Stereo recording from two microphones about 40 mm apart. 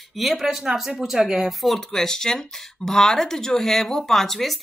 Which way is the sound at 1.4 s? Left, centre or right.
Centre.